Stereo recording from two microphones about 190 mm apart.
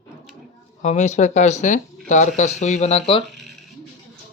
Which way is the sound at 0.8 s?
40° left (ahead or behind).